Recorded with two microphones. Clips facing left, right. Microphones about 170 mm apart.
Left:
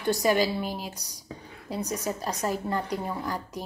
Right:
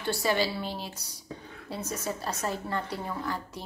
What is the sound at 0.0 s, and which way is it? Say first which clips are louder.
A woman's voice: left 4 dB; 15° left (ahead or behind).